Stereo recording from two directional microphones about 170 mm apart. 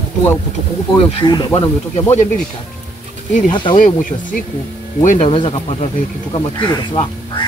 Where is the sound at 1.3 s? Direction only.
25° left (ahead or behind).